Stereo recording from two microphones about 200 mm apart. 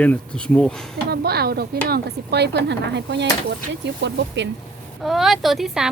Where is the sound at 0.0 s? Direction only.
5° left (ahead or behind).